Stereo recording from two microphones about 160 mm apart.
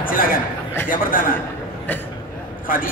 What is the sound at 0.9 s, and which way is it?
Speech, 60° left (ahead or behind).